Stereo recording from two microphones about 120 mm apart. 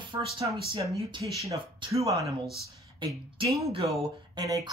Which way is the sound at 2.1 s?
Centre (ahead or behind).